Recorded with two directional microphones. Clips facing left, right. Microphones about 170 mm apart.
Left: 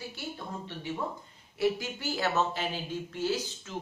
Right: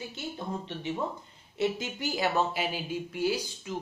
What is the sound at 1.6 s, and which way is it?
A man's voice, 20° right (ahead or behind).